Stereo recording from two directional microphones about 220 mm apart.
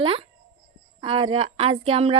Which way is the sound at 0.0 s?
25° right (ahead or behind).